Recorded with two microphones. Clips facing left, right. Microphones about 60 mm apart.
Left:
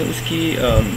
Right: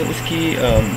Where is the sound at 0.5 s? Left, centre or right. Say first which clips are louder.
Right 1 dB; centre.